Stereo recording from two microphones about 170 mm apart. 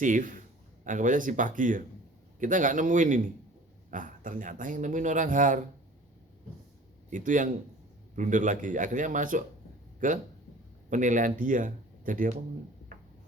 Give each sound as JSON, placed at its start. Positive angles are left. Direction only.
{"t": 0.0, "sound": "speech", "side_deg": -50}
{"t": 7.1, "sound": "speech", "side_deg": -50}